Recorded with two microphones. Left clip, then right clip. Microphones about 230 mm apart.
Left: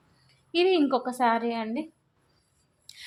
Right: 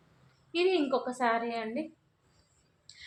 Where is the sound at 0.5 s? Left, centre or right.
Left.